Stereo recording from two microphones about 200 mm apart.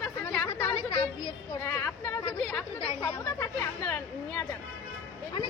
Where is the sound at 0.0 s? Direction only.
5° left (ahead or behind).